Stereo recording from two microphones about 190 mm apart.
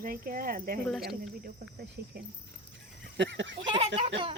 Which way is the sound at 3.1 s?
70° right (ahead or behind).